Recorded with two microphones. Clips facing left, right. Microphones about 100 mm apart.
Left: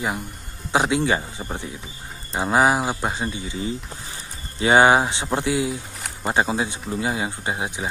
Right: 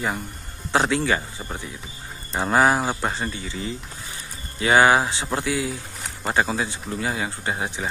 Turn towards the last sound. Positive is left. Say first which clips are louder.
# even
turn(degrees=15)  # may be behind; listen again after turning